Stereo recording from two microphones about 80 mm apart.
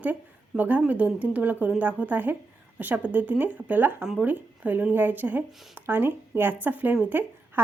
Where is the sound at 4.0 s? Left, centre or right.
Centre.